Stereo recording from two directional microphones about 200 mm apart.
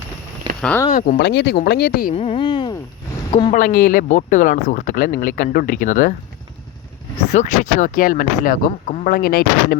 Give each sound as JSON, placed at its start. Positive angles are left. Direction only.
{"t": 0.6, "sound": "speech", "side_deg": 10}
{"t": 0.9, "sound": "speech", "side_deg": 45}
{"t": 2.1, "sound": "speech", "side_deg": 30}
{"t": 3.5, "sound": "speech", "side_deg": 40}
{"t": 7.3, "sound": "speech", "side_deg": 40}